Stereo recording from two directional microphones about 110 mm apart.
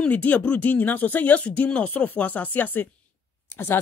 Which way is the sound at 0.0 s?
15° left (ahead or behind).